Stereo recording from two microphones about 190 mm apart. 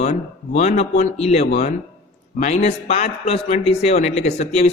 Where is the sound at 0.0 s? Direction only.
35° left (ahead or behind).